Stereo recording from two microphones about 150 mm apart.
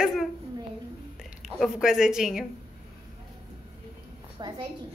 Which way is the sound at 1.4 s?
5° right (ahead or behind).